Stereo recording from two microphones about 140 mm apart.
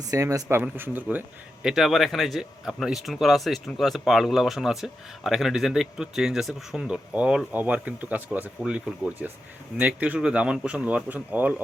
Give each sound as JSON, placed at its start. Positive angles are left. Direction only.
{"t": 0.1, "sound": "speech", "side_deg": -25}
{"t": 0.4, "sound": "speech", "side_deg": -15}